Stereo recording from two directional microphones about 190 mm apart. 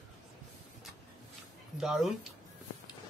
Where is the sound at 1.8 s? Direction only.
Centre (ahead or behind).